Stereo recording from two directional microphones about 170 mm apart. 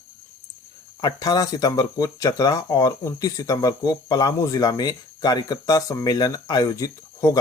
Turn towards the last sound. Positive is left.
turn(degrees=20)  # may be behind; listen again after turning